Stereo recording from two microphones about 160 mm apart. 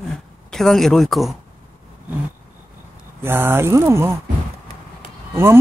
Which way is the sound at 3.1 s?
15° right (ahead or behind).